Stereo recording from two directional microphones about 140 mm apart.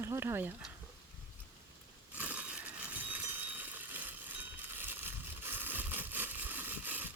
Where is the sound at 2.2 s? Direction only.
10° right (ahead or behind).